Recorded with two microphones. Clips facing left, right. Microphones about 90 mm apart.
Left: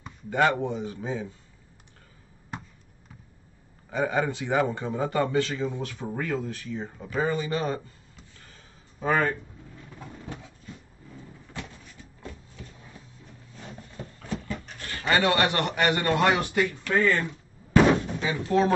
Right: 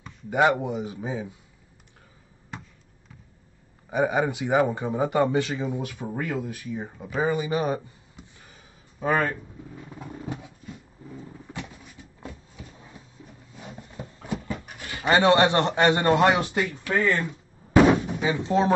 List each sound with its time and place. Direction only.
0.3 s speech: 15° right (ahead or behind)
3.9 s speech: 15° right (ahead or behind)
9.0 s speech: 5° right (ahead or behind)
9.8 s a sound: 15° right (ahead or behind)
15.0 s a man's voice: 25° right (ahead or behind)
16.9 s speech: 5° right (ahead or behind)
17.7 s door: 10° right (ahead or behind)
18.2 s a man's voice: 20° right (ahead or behind)